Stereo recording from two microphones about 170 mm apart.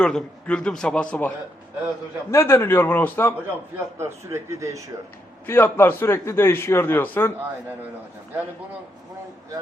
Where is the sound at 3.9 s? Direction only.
15° right (ahead or behind).